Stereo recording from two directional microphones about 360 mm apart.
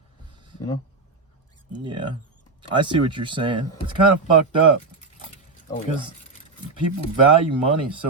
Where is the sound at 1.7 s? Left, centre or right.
Centre.